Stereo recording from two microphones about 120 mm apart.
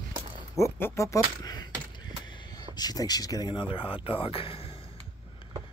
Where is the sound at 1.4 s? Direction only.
30° left (ahead or behind).